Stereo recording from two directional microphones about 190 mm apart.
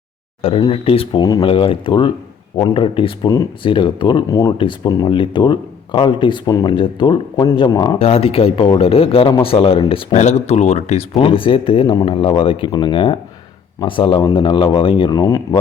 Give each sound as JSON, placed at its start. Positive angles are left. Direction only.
{"t": 0.4, "sound": "speech", "side_deg": 30}